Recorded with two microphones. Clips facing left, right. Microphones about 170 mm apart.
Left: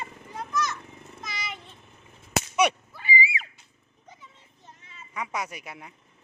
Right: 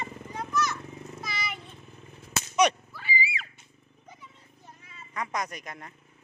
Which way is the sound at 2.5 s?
10° left (ahead or behind).